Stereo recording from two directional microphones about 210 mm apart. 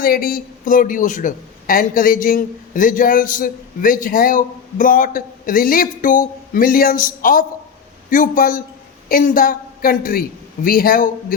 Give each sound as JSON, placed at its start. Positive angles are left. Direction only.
{"t": 0.0, "sound": "a man's voice", "side_deg": 45}